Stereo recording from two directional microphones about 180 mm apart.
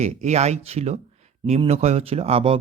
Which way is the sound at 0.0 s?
40° right (ahead or behind).